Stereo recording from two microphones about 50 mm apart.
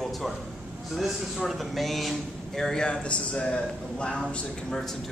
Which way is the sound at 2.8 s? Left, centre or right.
Left.